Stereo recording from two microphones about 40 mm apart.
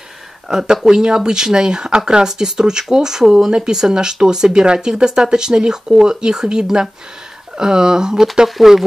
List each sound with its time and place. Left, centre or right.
0.5 s speech: centre